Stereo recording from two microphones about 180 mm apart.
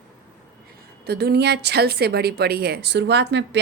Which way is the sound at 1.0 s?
60° right (ahead or behind).